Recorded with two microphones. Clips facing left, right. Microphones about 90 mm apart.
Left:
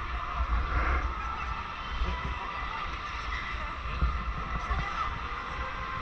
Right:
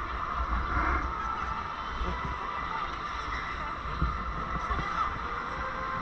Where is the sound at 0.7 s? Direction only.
25° right (ahead or behind).